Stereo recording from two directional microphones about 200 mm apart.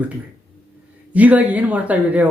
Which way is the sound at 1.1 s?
5° right (ahead or behind).